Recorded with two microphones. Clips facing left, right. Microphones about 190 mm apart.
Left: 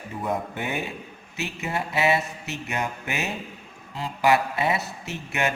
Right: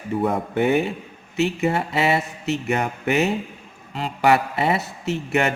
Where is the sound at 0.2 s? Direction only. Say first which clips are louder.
Right 7 dB; 60° right (ahead or behind).